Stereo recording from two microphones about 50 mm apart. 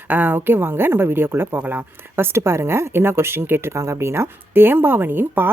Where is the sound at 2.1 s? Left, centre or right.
Right.